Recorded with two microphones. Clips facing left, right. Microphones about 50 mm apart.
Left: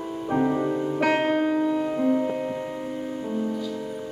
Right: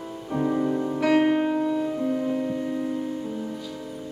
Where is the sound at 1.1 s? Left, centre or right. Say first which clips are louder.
Right 6 dB; left.